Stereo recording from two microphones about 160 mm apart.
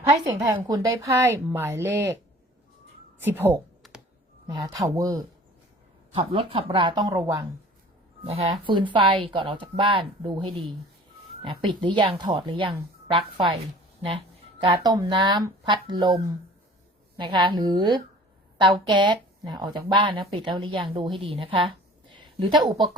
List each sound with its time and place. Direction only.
0.4 s speech: 20° right (ahead or behind)
3.2 s speech: 15° right (ahead or behind)
3.8 s computer keyboard: centre (ahead or behind)
4.4 s speech: 25° right (ahead or behind)
6.1 s speech: 35° right (ahead or behind)
8.3 s speech: 35° right (ahead or behind)
14.8 s speech: 25° right (ahead or behind)
17.2 s speech: 30° right (ahead or behind)